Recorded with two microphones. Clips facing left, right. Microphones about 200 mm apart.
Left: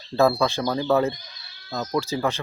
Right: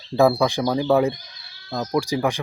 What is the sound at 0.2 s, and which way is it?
Speech, 15° right (ahead or behind).